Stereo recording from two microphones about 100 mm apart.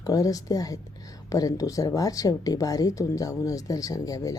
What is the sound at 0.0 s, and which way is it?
Speech, 35° left (ahead or behind).